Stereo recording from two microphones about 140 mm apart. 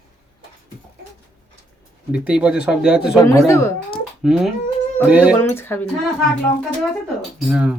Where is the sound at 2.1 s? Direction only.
10° right (ahead or behind).